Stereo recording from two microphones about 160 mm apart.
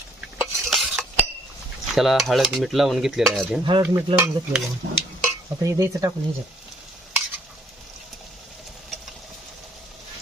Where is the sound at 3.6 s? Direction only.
25° right (ahead or behind).